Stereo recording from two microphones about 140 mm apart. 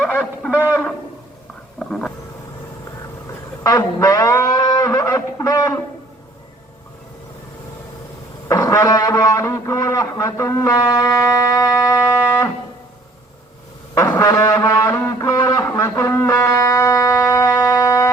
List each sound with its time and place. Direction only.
0.1 s speech: 10° left (ahead or behind)
1.8 s speech: 10° left (ahead or behind)
3.6 s a sound: 25° left (ahead or behind)
8.4 s brass instrument: 25° left (ahead or behind)
13.9 s brass instrument: 20° left (ahead or behind)